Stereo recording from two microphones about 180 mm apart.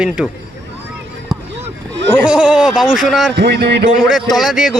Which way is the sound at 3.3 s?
65° right (ahead or behind).